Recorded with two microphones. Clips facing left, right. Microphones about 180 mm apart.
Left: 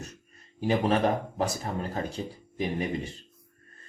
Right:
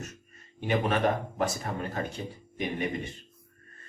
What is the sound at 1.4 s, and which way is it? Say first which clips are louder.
Speech: left 1 dB; 35° left (ahead or behind).